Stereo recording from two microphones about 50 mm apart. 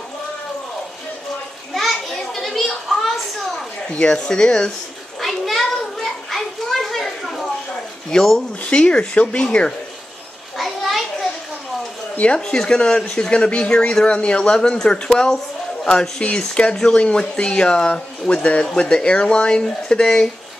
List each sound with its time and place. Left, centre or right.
1.7 s children playing: centre
3.9 s speech: centre
5.2 s children playing: centre
8.1 s speech: centre
8.6 s speech: left
10.6 s children playing: centre
12.4 s speech: centre